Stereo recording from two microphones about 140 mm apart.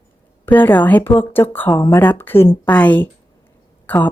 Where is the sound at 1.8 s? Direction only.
25° left (ahead or behind).